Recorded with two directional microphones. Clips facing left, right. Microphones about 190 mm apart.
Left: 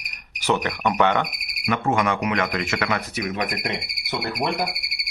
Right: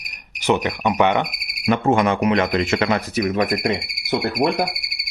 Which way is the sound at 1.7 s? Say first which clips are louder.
Right 5 dB; 30° right (ahead or behind).